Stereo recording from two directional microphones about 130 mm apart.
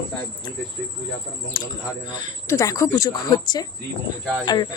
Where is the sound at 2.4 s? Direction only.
25° left (ahead or behind).